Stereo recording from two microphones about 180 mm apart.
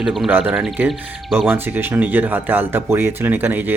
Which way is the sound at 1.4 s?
10° right (ahead or behind).